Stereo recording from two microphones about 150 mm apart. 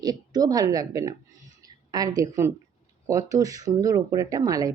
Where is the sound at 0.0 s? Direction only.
25° right (ahead or behind).